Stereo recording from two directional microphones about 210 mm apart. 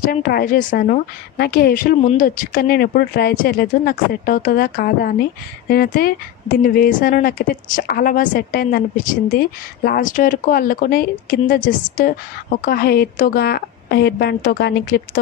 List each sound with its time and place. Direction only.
0.0 s a woman's voice: 45° left (ahead or behind)